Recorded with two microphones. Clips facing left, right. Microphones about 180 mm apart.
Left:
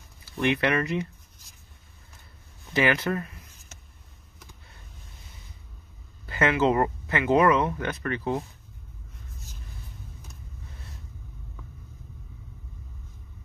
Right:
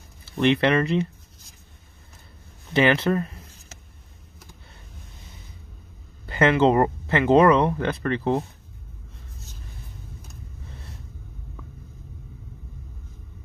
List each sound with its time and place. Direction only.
0.4 s speech: 30° right (ahead or behind)
2.7 s speech: 30° right (ahead or behind)
6.2 s speech: 30° right (ahead or behind)